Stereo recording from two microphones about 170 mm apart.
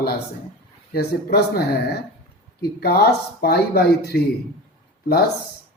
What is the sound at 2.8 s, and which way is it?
Speech, 65° left (ahead or behind).